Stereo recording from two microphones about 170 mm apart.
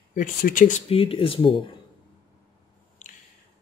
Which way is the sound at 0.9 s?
35° left (ahead or behind).